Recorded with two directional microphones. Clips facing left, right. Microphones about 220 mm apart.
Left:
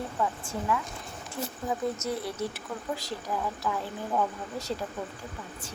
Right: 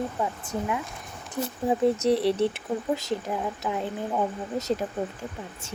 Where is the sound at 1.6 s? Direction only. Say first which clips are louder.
Right 9 dB; 30° right (ahead or behind).